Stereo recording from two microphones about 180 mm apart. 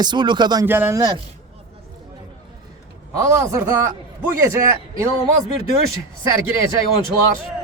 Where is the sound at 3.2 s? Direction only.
15° right (ahead or behind).